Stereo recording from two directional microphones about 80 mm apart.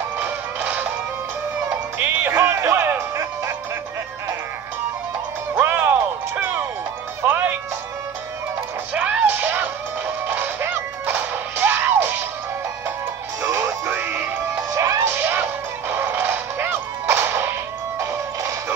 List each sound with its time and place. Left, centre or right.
0.2 s music: right
2.3 s music: right
5.5 s music: right
8.9 s music: right
13.4 s music: right
14.7 s music: right
15.0 s music: right